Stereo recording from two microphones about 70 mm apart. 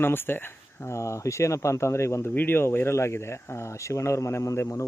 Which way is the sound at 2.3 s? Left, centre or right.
Left.